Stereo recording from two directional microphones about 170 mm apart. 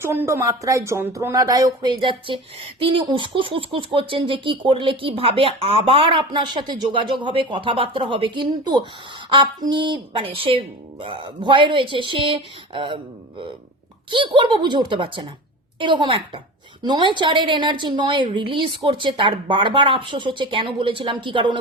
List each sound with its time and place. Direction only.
0.0 s speech: 15° right (ahead or behind); by 13.0 s 30° right (ahead or behind)
14.1 s speech: 30° right (ahead or behind)